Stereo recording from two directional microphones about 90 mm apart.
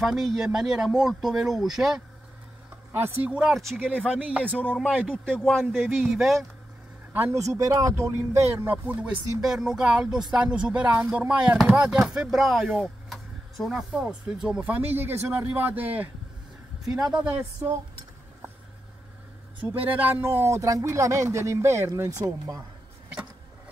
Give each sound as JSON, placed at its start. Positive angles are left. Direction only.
{"t": 0.0, "sound": "speech", "side_deg": -5}
{"t": 2.9, "sound": "speech", "side_deg": -20}
{"t": 3.5, "sound": "speech", "side_deg": 5}
{"t": 4.1, "sound": "speech", "side_deg": -15}
{"t": 4.5, "sound": "a man's voice", "side_deg": 15}
{"t": 4.7, "sound": "speech", "side_deg": -5}
{"t": 5.0, "sound": "a man's voice", "side_deg": 10}
{"t": 7.3, "sound": "speech", "side_deg": -40}
{"t": 8.8, "sound": "speech", "side_deg": -15}
{"t": 9.4, "sound": "speech", "side_deg": -5}
{"t": 14.6, "sound": "speech", "side_deg": -20}
{"t": 16.8, "sound": "speech", "side_deg": -5}
{"t": 17.3, "sound": "speech", "side_deg": -20}
{"t": 19.8, "sound": "speech", "side_deg": -20}